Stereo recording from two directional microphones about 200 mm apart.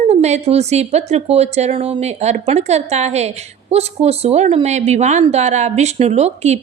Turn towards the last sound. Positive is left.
turn(degrees=-35)  # may be behind; listen again after turning